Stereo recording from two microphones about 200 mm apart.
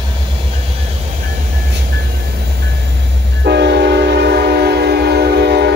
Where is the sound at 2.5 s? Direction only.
60° right (ahead or behind).